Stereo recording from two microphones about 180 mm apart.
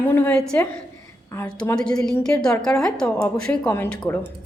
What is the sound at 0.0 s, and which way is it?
A woman's voice, 10° left (ahead or behind).